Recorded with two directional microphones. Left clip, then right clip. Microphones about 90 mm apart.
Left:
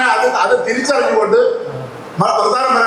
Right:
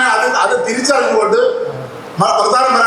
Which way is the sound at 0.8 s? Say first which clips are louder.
Right 1 dB; 55° right (ahead or behind).